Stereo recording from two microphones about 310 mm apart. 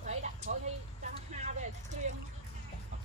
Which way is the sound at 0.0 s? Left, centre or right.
Right.